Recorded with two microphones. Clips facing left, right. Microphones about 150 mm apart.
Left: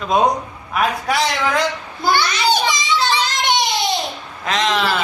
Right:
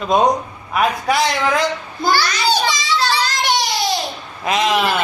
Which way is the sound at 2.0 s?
20° left (ahead or behind).